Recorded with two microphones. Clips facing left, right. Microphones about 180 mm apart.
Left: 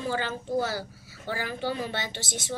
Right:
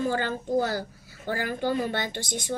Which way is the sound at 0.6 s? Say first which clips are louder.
Right 3 dB; 50° right (ahead or behind).